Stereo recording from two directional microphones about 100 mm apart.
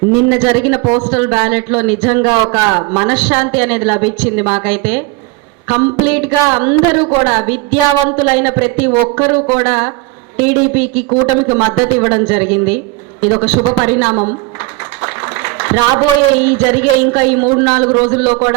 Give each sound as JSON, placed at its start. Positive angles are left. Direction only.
{"t": 0.1, "sound": "a woman's voice", "side_deg": -20}
{"t": 15.0, "sound": "a sound", "side_deg": -20}
{"t": 16.4, "sound": "a woman's voice", "side_deg": -20}